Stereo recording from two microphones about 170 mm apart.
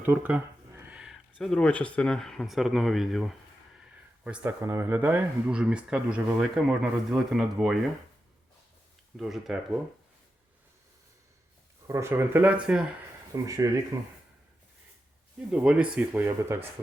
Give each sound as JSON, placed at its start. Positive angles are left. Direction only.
{"t": 0.0, "sound": "speech", "side_deg": -10}
{"t": 4.2, "sound": "speech", "side_deg": -10}
{"t": 9.1, "sound": "speech", "side_deg": 0}
{"t": 11.9, "sound": "speech", "side_deg": -15}
{"t": 13.3, "sound": "speech", "side_deg": -20}
{"t": 15.5, "sound": "speech", "side_deg": -5}